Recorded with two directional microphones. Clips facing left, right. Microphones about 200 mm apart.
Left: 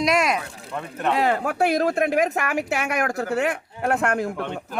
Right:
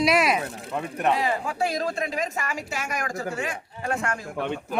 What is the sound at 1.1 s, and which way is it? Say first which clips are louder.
A woman's voice: left 4 dB; 65° left (ahead or behind).